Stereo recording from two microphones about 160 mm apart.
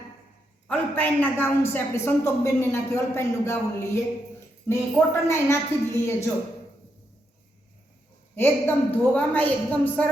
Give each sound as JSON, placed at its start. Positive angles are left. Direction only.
{"t": 0.7, "sound": "a man's voice", "side_deg": 10}
{"t": 8.4, "sound": "a man's voice", "side_deg": 10}